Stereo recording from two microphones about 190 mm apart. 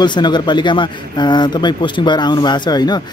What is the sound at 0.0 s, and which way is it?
Speech, 25° left (ahead or behind).